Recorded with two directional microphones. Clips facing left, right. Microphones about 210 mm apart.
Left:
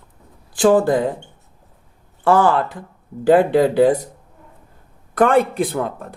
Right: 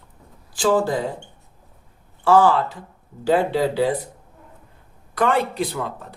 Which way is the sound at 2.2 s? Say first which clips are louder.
Left 1 dB; 55° left (ahead or behind).